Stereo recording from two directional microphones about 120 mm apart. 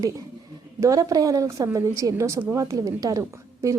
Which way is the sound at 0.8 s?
25° right (ahead or behind).